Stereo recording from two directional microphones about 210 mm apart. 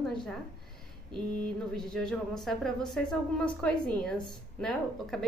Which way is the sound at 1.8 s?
5° left (ahead or behind).